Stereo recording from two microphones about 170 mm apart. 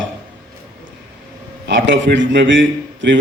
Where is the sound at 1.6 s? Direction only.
90° right.